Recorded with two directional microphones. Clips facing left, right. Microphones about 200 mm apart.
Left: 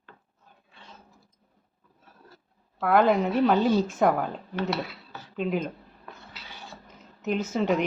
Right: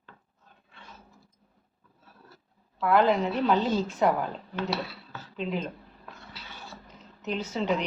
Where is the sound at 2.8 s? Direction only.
50° left (ahead or behind).